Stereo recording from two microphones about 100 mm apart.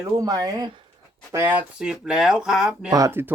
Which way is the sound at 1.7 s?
5° right (ahead or behind).